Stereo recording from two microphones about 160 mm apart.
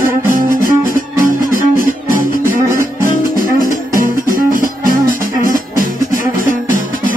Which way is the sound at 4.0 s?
60° right (ahead or behind).